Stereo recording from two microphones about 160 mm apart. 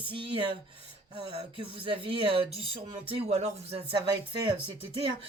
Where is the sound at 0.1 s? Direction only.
30° right (ahead or behind).